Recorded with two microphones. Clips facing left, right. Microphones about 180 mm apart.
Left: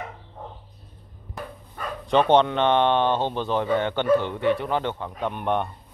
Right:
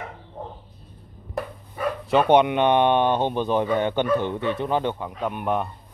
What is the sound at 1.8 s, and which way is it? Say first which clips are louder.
Speech: right 1 dB; 5° right (ahead or behind).